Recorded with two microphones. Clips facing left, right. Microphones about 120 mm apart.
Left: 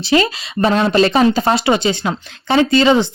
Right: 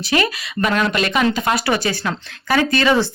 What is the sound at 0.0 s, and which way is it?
Speech, 25° left (ahead or behind).